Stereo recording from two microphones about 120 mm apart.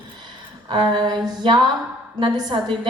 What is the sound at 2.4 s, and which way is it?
Speech, 35° right (ahead or behind).